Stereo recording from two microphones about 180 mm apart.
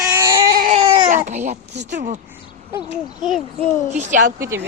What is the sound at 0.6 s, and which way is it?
Speech, 35° right (ahead or behind).